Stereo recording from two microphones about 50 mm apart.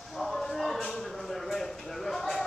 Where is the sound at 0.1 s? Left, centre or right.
Centre.